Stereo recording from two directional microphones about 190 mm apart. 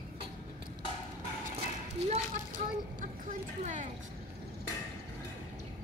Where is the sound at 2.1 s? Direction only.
45° right (ahead or behind).